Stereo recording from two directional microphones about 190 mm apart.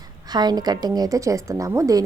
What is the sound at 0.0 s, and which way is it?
A woman's voice, 20° right (ahead or behind).